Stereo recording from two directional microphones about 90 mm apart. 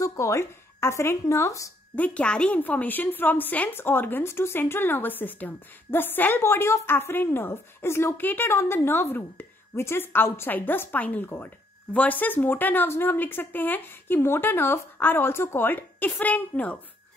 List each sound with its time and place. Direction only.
0.0 s a woman's voice: 35° left (ahead or behind)
2.0 s a woman's voice: 15° left (ahead or behind)